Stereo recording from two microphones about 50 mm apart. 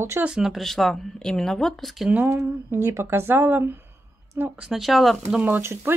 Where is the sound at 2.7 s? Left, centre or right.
Right.